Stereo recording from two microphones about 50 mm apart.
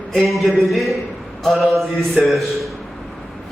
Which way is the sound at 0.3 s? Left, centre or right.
Centre.